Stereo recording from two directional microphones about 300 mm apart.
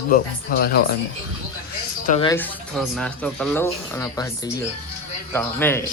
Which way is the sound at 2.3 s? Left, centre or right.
Centre.